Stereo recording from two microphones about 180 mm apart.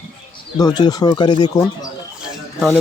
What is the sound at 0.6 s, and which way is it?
Speech, 25° left (ahead or behind).